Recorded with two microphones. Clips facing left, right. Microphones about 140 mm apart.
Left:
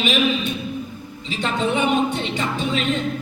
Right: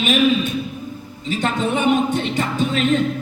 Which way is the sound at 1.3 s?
45° right (ahead or behind).